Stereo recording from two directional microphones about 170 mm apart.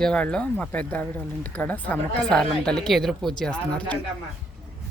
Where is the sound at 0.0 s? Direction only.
5° left (ahead or behind).